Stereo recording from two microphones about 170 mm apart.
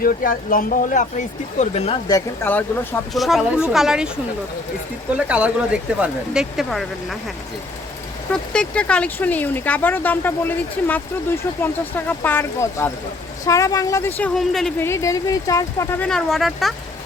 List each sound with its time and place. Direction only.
0.0 s speech: 55° left (ahead or behind); by 2.0 s 40° left (ahead or behind)
2.0 s speech: 15° left (ahead or behind)
3.2 s speech: centre (ahead or behind)
5.1 s speech: 5° right (ahead or behind)
8.3 s a woman's voice: 5° left (ahead or behind)
14.2 s speech: 5° left (ahead or behind)
14.8 s speech: 15° left (ahead or behind)
16.0 s speech: centre (ahead or behind)